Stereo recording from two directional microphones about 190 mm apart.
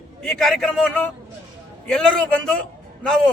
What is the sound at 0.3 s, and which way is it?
A man's voice, centre (ahead or behind).